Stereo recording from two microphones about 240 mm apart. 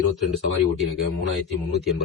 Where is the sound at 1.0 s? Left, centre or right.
Left.